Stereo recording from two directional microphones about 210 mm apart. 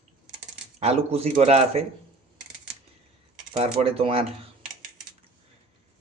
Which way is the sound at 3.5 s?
30° right (ahead or behind).